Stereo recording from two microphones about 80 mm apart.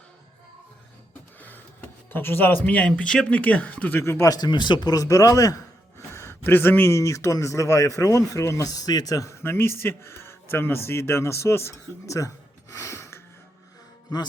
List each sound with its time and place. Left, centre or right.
1.4 s speech: left
4.3 s speech: left
6.1 s a sound: left
6.9 s speech: left
9.4 s speech: left
12.7 s a sound: left